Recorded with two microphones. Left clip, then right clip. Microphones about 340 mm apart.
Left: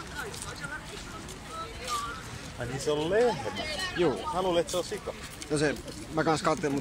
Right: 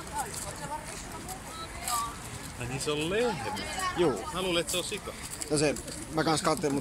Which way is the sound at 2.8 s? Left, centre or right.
Left.